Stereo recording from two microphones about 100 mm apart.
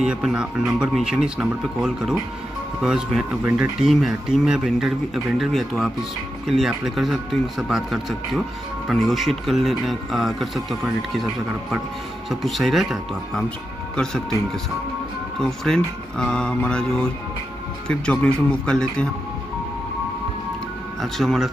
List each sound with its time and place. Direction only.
0.0 s speech: 10° right (ahead or behind)
3.4 s speech: 15° right (ahead or behind)
3.8 s speech: centre (ahead or behind)
12.3 s speech: centre (ahead or behind)
15.4 s speech: 5° left (ahead or behind)
18.1 s speech: 10° left (ahead or behind)
21.0 s speech: centre (ahead or behind)